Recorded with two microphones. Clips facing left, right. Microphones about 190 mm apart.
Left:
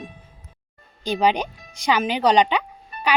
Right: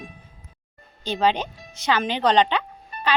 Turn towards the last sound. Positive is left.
turn(degrees=10)  # may be behind; listen again after turning